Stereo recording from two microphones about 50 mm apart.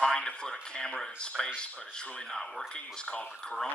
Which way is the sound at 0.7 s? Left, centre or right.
Centre.